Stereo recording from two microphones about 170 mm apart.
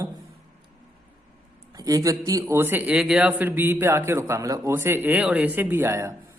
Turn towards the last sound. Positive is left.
turn(degrees=-15)  # may be behind; listen again after turning